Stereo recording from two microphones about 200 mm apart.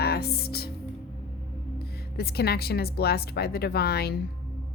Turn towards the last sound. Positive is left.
turn(degrees=50)  # may be behind; listen again after turning